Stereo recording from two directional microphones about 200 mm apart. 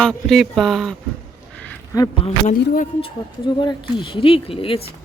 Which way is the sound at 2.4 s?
40° left (ahead or behind).